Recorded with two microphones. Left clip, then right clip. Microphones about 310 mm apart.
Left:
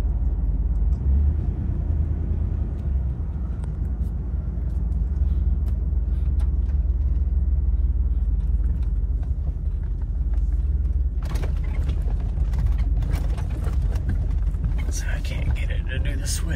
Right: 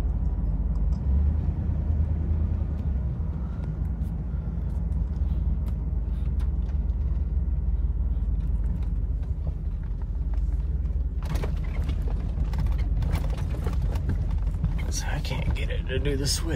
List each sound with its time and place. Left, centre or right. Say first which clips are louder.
15.0 s vehicle: right 1 dB; centre